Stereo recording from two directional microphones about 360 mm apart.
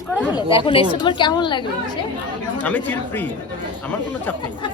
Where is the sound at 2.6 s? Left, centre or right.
Centre.